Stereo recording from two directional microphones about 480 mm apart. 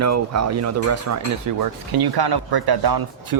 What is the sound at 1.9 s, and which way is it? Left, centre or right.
Speech, right.